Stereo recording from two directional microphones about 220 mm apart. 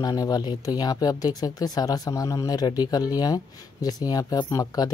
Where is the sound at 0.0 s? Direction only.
15° left (ahead or behind).